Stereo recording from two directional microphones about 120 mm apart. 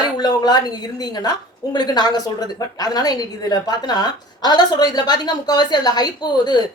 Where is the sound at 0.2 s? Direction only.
35° left (ahead or behind).